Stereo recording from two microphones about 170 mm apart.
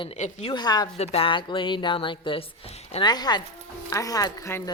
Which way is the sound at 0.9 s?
35° left (ahead or behind).